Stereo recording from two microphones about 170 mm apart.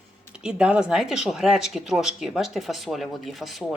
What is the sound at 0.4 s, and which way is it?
Speech, 5° right (ahead or behind).